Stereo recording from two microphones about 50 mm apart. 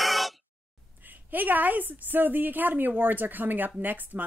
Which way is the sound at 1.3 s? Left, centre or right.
Right.